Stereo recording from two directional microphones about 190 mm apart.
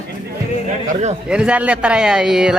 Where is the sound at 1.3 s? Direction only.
5° right (ahead or behind).